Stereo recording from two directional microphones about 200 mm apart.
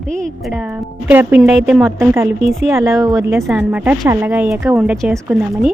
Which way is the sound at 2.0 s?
15° right (ahead or behind).